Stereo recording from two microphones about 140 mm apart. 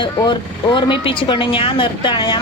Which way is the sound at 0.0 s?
35° left (ahead or behind).